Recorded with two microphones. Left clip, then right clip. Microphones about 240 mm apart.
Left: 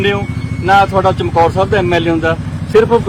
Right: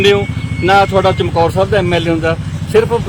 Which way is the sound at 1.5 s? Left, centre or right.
Right.